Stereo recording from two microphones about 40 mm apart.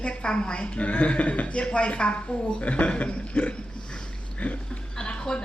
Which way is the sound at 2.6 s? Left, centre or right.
Left.